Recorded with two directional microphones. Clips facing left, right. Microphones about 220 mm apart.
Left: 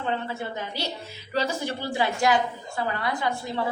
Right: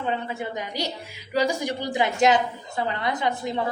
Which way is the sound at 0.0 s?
15° right (ahead or behind).